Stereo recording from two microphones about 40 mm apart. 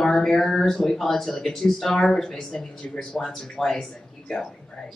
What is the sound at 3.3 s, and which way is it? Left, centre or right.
Speech, centre.